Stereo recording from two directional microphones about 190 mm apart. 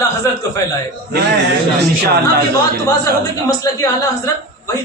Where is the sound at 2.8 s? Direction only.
15° left (ahead or behind).